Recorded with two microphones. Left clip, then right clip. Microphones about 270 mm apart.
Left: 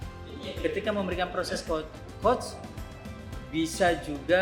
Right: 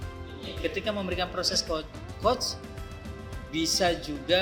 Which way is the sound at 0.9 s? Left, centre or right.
Right.